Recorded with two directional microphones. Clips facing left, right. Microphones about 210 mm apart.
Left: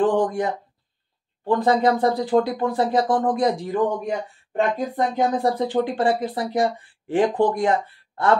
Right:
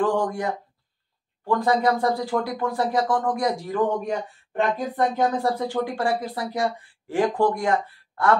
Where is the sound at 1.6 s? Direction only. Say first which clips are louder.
Left 3 dB; 25° left (ahead or behind).